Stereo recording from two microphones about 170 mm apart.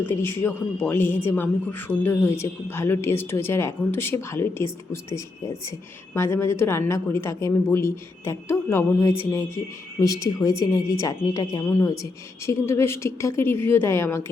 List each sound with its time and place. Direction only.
0.0 s a woman's voice: 15° left (ahead or behind)